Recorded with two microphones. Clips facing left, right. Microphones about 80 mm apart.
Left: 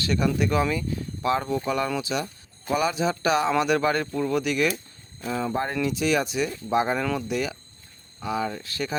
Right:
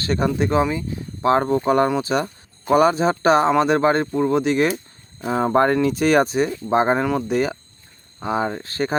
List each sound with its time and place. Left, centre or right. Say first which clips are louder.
0.0 s speech: right 3 dB; right
1.3 s speech: right 8 dB; right
5.2 s speech: right 7 dB; right
5.5 s speech: right 15 dB; right
5.8 s speech: right 7 dB; right
7.0 s speech: right 6 dB; right
7.3 s speech: right 7 dB; right